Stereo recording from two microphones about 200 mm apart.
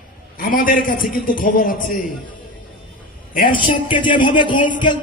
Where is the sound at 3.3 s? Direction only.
45° left (ahead or behind).